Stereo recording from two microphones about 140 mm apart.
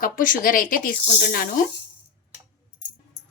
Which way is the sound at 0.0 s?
80° left.